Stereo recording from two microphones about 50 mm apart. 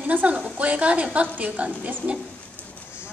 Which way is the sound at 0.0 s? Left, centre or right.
Right.